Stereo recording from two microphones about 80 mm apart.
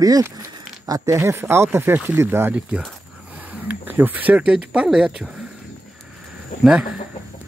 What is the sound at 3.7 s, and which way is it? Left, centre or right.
Speech, right.